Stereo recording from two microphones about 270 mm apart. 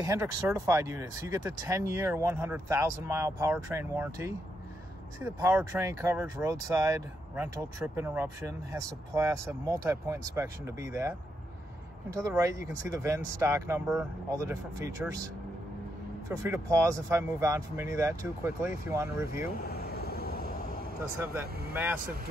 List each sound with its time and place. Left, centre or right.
0.0 s speech: centre
16.3 s speech: centre
19.3 s air conditioning: left
21.2 s speech: centre